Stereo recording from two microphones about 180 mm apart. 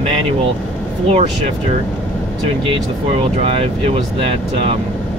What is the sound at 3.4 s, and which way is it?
Speech, 30° right (ahead or behind).